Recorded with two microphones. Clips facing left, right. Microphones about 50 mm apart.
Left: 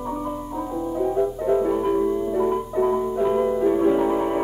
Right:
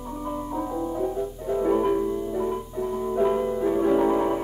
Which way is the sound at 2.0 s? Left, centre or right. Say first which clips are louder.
Left 5 dB; centre.